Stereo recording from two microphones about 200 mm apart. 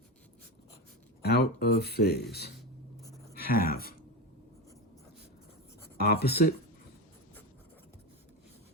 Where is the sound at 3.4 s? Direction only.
50° left (ahead or behind).